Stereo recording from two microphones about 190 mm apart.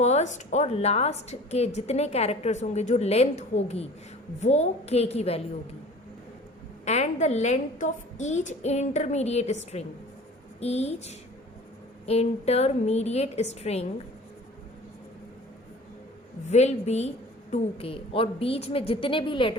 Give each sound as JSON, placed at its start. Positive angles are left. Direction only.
{"t": 0.0, "sound": "a woman's voice", "side_deg": 35}
{"t": 6.8, "sound": "a woman's voice", "side_deg": 35}
{"t": 16.5, "sound": "a woman's voice", "side_deg": 35}